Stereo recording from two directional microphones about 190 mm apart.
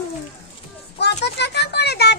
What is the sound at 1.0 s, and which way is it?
A child's voice, 60° left (ahead or behind).